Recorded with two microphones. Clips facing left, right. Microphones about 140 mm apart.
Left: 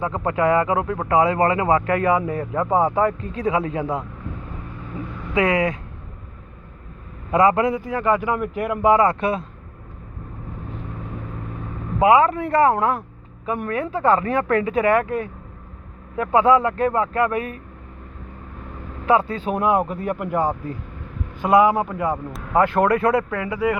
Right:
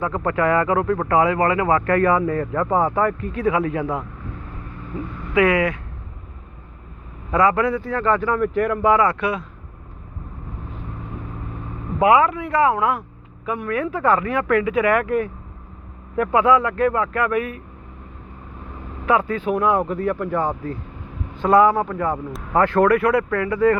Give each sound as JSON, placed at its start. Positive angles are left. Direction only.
{"t": 0.0, "sound": "speech", "side_deg": 20}
{"t": 5.3, "sound": "speech", "side_deg": 25}
{"t": 7.3, "sound": "speech", "side_deg": 20}
{"t": 11.9, "sound": "speech", "side_deg": 25}
{"t": 12.3, "sound": "speech", "side_deg": 45}
{"t": 12.7, "sound": "vehicle", "side_deg": 25}
{"t": 13.7, "sound": "speech", "side_deg": 35}
{"t": 19.0, "sound": "speech", "side_deg": 35}